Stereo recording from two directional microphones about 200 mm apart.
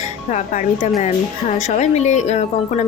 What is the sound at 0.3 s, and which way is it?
Speech, 35° left (ahead or behind).